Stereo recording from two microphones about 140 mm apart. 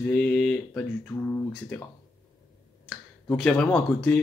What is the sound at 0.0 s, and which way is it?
Speech, 10° left (ahead or behind).